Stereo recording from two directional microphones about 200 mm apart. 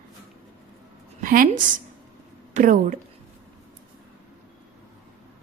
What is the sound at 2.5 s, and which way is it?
Speech, 40° right (ahead or behind).